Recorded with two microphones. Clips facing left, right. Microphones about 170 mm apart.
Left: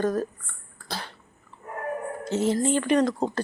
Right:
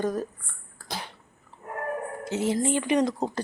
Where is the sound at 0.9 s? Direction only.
15° right (ahead or behind).